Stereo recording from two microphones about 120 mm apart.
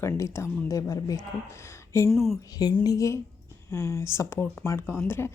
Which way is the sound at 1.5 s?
25° left (ahead or behind).